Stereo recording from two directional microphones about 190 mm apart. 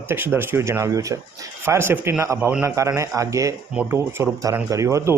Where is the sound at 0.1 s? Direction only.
10° right (ahead or behind).